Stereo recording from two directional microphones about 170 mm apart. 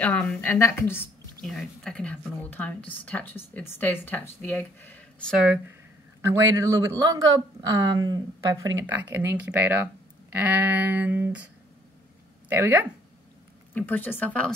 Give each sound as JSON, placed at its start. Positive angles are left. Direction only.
{"t": 0.0, "sound": "a woman's voice", "side_deg": 10}
{"t": 1.4, "sound": "a woman's voice", "side_deg": 0}
{"t": 5.4, "sound": "a sound", "side_deg": -10}
{"t": 6.2, "sound": "speech", "side_deg": -15}
{"t": 9.1, "sound": "a sound", "side_deg": -15}
{"t": 12.4, "sound": "speech", "side_deg": -10}
{"t": 13.7, "sound": "a woman's voice", "side_deg": 10}